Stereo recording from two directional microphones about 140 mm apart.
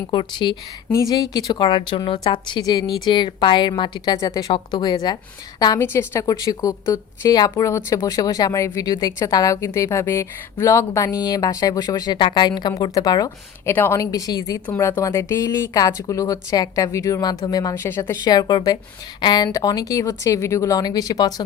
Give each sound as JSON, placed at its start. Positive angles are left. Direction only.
{"t": 0.1, "sound": "a woman's voice", "side_deg": 35}
{"t": 0.9, "sound": "a woman's voice", "side_deg": 25}
{"t": 13.7, "sound": "a woman's voice", "side_deg": 15}
{"t": 18.3, "sound": "a woman's voice", "side_deg": 30}